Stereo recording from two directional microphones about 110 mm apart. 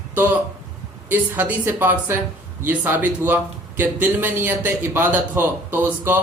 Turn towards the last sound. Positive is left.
turn(degrees=-20)  # may be behind; listen again after turning